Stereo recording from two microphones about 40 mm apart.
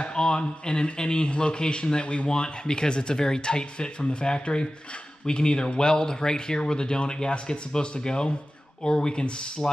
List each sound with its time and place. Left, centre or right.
0.0 s speech: left